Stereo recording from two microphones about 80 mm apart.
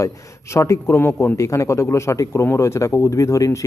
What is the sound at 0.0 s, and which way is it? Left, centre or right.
Speech, left.